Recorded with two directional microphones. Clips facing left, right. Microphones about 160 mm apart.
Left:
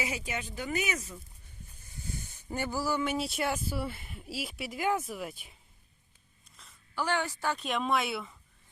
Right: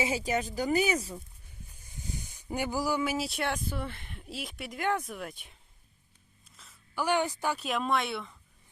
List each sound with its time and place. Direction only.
0.0 s speech: 30° right (ahead or behind)
1.7 s speech: 15° right (ahead or behind); by 5.5 s 5° left (ahead or behind)
6.6 s a sound: centre (ahead or behind)
6.9 s a woman's voice: 15° right (ahead or behind)
7.6 s speech: centre (ahead or behind)